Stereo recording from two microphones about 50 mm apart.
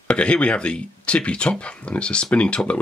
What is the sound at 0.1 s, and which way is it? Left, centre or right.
Speech, left.